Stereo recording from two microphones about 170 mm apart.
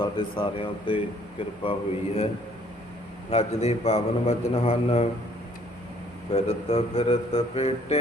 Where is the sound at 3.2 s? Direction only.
35° left (ahead or behind).